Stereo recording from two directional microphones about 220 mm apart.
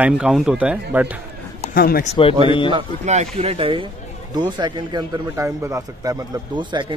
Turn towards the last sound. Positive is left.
turn(degrees=-20)  # may be behind; listen again after turning